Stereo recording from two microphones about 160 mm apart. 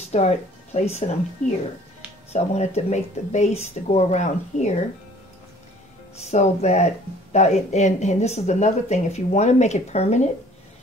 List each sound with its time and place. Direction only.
0.1 s speech: 45° left (ahead or behind)
6.1 s speech: 45° left (ahead or behind)